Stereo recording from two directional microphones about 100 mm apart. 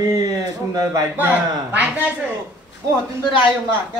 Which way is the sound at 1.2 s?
15° right (ahead or behind).